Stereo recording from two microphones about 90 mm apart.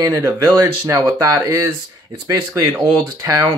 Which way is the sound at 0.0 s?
35° right (ahead or behind).